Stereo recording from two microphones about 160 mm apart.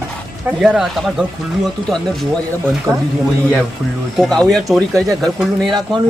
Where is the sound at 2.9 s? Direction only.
15° right (ahead or behind).